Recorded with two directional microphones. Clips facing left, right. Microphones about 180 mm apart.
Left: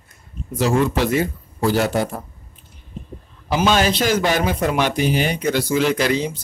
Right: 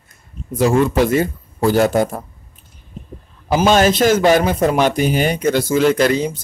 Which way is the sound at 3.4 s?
45° right (ahead or behind).